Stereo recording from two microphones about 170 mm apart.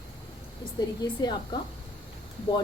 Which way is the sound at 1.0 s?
25° left (ahead or behind).